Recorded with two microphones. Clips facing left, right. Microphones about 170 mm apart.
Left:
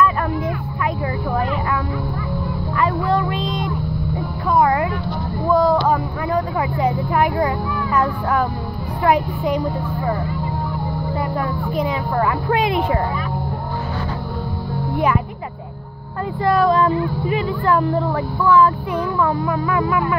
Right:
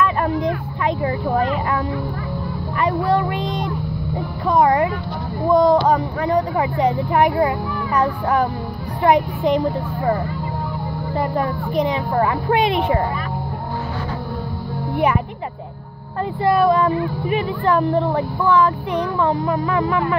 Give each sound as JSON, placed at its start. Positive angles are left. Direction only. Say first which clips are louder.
{"t": 0.0, "sound": "vehicle", "louder": "even", "side_deg": -20}
{"t": 3.1, "sound": "speech", "louder": "right 1 dB", "side_deg": -15}
{"t": 11.1, "sound": "speech", "louder": "right 4 dB", "side_deg": -20}
{"t": 16.4, "sound": "speech", "louder": "even", "side_deg": -15}